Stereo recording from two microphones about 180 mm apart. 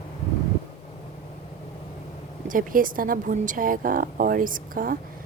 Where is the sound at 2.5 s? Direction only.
50° right (ahead or behind).